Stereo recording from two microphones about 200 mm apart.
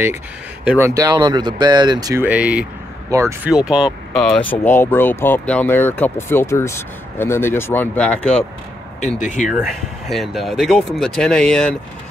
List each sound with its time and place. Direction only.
0.7 s speech: 10° right (ahead or behind)
2.2 s speech: 5° right (ahead or behind)
3.5 s speech: 5° right (ahead or behind)
4.5 s speech: 10° left (ahead or behind)
9.2 s speech: 40° left (ahead or behind)
9.5 s speech: centre (ahead or behind)